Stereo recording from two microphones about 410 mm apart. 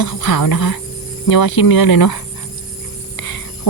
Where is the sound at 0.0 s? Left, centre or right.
Left.